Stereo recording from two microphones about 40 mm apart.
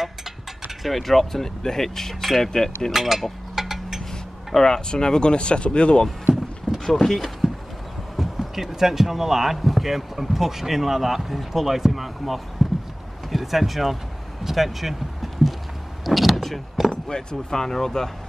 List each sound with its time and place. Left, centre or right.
0.8 s speech: centre
2.9 s mechanisms: centre
4.6 s speech: centre
6.9 s speech: centre
8.2 s speech: centre
12.6 s a sound: centre
13.3 s speech: centre
14.4 s vehicle: centre
16.9 s speech: centre